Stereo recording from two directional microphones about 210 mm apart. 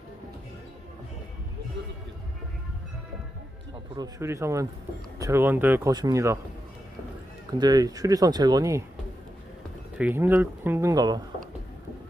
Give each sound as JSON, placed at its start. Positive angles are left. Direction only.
{"t": 3.9, "sound": "speech", "side_deg": -15}
{"t": 7.5, "sound": "speech", "side_deg": -20}
{"t": 9.9, "sound": "speech", "side_deg": -10}